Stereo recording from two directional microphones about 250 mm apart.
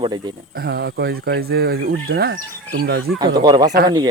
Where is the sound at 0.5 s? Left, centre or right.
Right.